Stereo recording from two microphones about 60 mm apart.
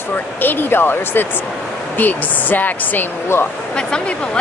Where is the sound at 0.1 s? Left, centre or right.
Left.